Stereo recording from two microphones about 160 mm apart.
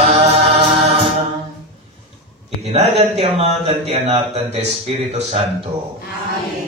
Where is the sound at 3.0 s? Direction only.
40° right (ahead or behind).